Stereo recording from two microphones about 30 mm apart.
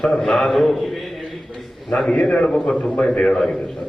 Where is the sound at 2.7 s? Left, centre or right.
Left.